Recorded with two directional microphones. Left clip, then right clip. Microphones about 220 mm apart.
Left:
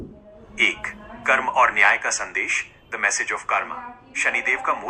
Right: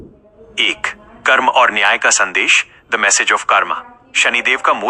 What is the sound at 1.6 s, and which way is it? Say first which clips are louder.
Speech: right 5 dB; 35° right (ahead or behind).